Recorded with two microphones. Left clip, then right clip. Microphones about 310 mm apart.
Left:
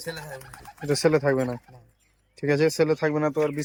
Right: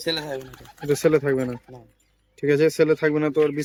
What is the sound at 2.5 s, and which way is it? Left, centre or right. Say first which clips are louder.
Speech: right 3 dB; centre.